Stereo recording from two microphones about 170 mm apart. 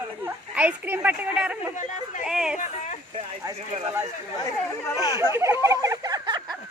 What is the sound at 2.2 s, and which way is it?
Speech, 5° right (ahead or behind).